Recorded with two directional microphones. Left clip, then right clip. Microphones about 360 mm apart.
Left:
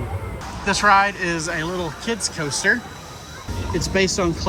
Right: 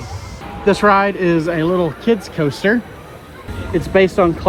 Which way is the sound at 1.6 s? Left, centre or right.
Right.